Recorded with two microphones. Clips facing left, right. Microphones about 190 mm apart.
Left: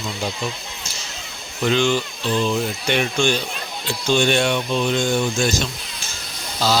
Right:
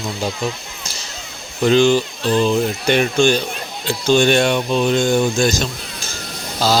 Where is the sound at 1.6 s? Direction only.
35° right (ahead or behind).